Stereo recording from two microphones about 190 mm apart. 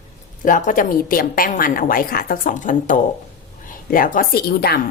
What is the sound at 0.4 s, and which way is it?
Speech, 45° left (ahead or behind).